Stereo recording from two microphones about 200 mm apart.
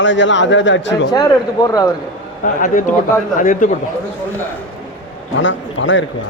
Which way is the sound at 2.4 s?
40° left (ahead or behind).